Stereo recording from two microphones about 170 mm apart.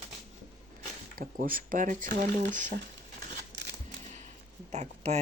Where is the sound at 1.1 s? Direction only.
55° right (ahead or behind).